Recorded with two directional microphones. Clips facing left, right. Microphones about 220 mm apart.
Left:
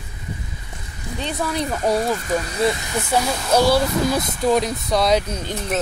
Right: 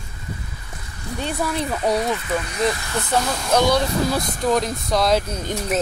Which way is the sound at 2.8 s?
10° left (ahead or behind).